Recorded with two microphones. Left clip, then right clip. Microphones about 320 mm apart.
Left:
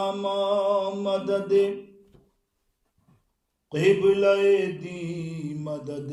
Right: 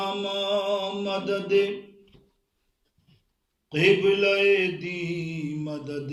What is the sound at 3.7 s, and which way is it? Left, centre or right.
Mantra, centre.